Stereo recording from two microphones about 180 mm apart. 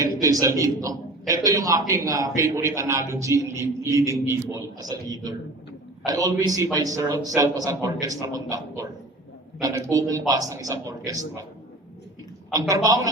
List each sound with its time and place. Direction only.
0.0 s a man's voice: 20° right (ahead or behind)
12.5 s a man's voice: 20° right (ahead or behind)